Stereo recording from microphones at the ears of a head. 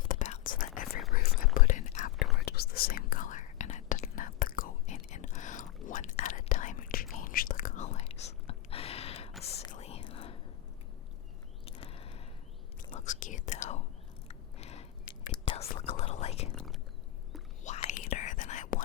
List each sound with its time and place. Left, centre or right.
0.0 s whispering: left
11.6 s a sound: left
12.9 s whispering: left
17.6 s whispering: left